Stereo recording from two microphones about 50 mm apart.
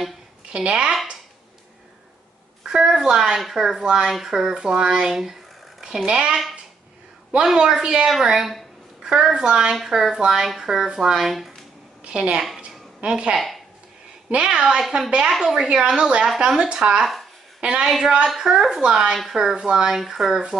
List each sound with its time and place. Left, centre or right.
0.5 s speech: centre
2.6 s a woman's voice: centre
7.6 s speech: centre
8.1 s a sound: centre
9.1 s speech: centre
9.8 s a woman's voice: centre
13.0 s speech: centre
13.3 s speech: centre
14.3 s speech: centre
14.8 s speech: centre
15.3 s a woman's voice: centre
19.1 s speech: centre
19.5 s speech: centre